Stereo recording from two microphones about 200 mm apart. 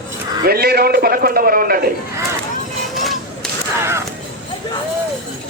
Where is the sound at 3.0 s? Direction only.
Centre (ahead or behind).